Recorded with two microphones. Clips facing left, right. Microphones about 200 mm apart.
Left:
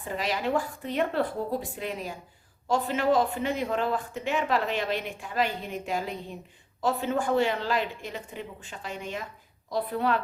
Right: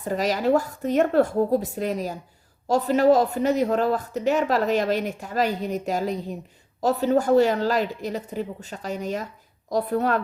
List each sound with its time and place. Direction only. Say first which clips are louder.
0.0 s a woman's voice: right 7 dB; 40° right (ahead or behind)